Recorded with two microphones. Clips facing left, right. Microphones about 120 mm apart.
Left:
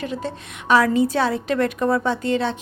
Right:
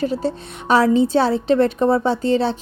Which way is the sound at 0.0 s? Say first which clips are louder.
Right 6 dB; 35° right (ahead or behind).